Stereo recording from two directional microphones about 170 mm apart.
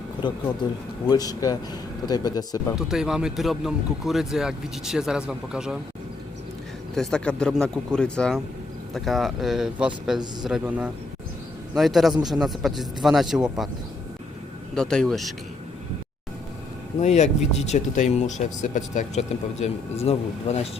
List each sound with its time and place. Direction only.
0.2 s speech: 25° left (ahead or behind)
2.7 s a man's voice: 5° right (ahead or behind)
6.9 s a man's voice: 5° left (ahead or behind)
14.8 s a man's voice: 5° left (ahead or behind)
17.0 s speech: 40° left (ahead or behind)